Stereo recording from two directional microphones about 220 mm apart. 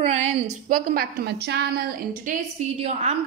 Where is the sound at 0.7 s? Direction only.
40° right (ahead or behind).